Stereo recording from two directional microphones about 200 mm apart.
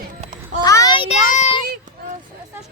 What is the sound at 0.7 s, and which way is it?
Speech, 20° left (ahead or behind).